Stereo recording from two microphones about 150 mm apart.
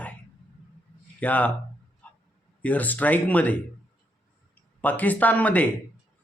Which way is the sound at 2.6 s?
10° left (ahead or behind).